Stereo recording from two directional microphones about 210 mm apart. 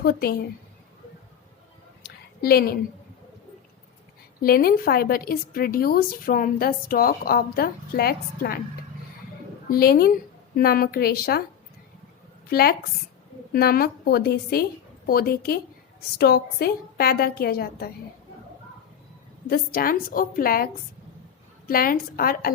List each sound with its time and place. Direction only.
0.0 s speech: 45° left (ahead or behind)
2.0 s a sound: 45° left (ahead or behind)
4.4 s speech: 45° left (ahead or behind)
9.6 s speech: 45° left (ahead or behind)
12.5 s a woman's voice: 45° left (ahead or behind)
19.5 s speech: 45° left (ahead or behind)
21.7 s speech: 45° left (ahead or behind)